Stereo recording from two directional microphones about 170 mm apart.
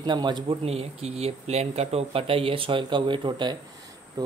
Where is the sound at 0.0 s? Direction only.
25° right (ahead or behind).